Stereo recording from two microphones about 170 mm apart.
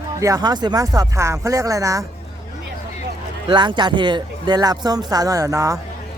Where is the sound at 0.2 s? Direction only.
20° right (ahead or behind).